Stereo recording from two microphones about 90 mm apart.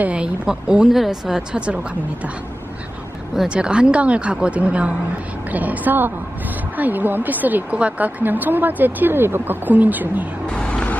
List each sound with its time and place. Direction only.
0.0 s speech: 15° right (ahead or behind)
3.3 s a woman's voice: 5° right (ahead or behind)
10.5 s vehicle: 10° left (ahead or behind)